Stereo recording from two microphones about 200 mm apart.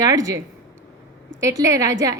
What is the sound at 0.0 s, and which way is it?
A woman's voice, 15° right (ahead or behind).